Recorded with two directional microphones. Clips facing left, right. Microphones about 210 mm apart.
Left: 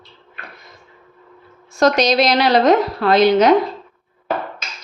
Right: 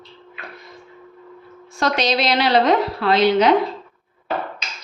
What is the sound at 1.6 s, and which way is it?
A woman's voice, 45° left (ahead or behind).